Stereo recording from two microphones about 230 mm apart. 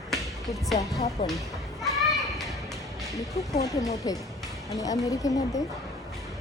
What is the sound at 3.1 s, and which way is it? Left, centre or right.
A woman's voice, centre.